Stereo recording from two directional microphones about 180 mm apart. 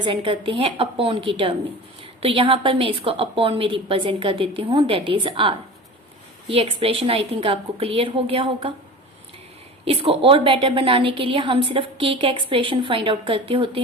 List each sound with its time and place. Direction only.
0.0 s a woman's voice: 25° right (ahead or behind)
9.8 s a woman's voice: 30° right (ahead or behind)